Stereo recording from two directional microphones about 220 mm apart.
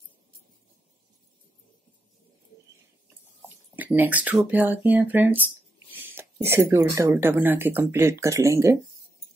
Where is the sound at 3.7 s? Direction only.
5° right (ahead or behind).